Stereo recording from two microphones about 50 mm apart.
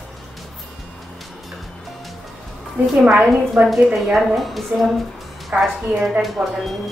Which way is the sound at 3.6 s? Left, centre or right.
Right.